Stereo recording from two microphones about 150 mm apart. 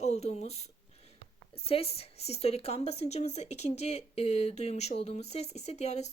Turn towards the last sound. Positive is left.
turn(degrees=50)  # may be behind; listen again after turning